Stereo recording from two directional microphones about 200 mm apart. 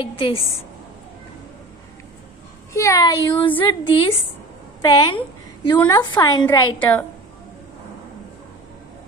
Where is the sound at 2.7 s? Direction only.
15° left (ahead or behind).